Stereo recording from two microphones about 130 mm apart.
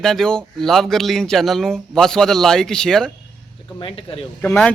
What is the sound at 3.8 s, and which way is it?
Speech, 45° left (ahead or behind).